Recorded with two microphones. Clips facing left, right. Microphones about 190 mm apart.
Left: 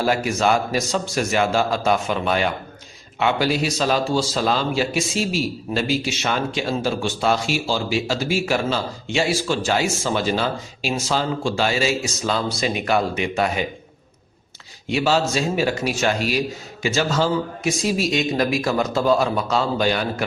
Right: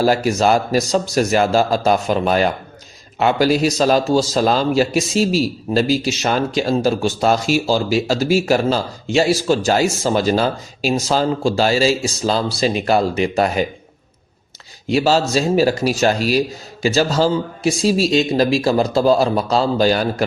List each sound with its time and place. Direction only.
0.0 s a man's voice: 35° right (ahead or behind)
14.8 s a man's voice: 35° right (ahead or behind)